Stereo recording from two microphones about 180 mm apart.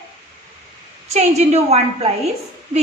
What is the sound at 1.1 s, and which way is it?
A woman's voice, 40° right (ahead or behind).